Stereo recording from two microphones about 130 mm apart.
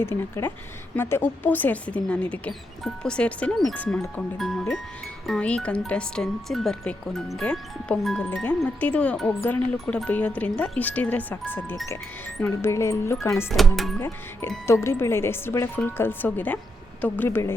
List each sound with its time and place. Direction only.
0.0 s speech: 20° left (ahead or behind)
14.7 s speech: 20° left (ahead or behind)